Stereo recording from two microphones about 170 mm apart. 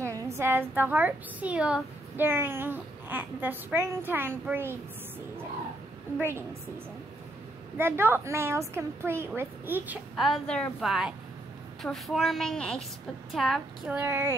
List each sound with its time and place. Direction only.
0.0 s a sound: 20° right (ahead or behind)
0.4 s a woman's voice: 10° right (ahead or behind)
6.1 s a woman's voice: 15° right (ahead or behind)
7.7 s a woman's voice: 15° right (ahead or behind)
10.1 s a woman's voice: centre (ahead or behind)
13.9 s a woman's voice: 15° right (ahead or behind)